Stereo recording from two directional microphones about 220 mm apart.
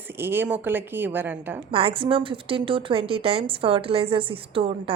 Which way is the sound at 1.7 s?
25° right (ahead or behind).